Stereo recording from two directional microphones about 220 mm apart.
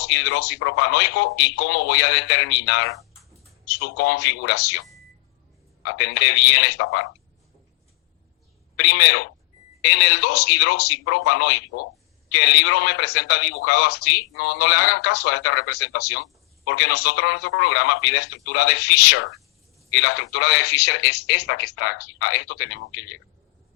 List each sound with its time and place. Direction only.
0.0 s a man's voice: 50° left (ahead or behind)
5.8 s a man's voice: 50° left (ahead or behind)
8.8 s a man's voice: 50° left (ahead or behind)